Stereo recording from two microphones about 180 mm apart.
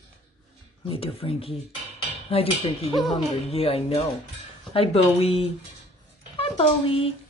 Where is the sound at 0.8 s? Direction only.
30° left (ahead or behind).